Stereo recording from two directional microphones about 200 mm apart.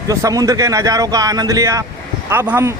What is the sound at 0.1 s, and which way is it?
Speech, 15° right (ahead or behind).